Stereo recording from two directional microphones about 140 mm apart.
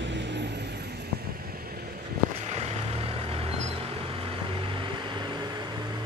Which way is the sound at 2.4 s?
50° right (ahead or behind).